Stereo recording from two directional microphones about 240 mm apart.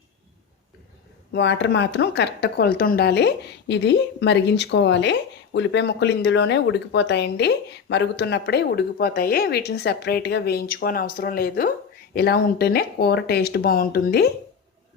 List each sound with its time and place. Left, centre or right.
1.3 s speech: left